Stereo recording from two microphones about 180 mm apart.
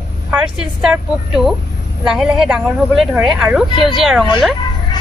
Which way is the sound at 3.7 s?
25° left (ahead or behind).